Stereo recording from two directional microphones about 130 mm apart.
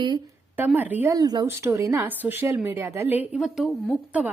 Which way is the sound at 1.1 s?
30° right (ahead or behind).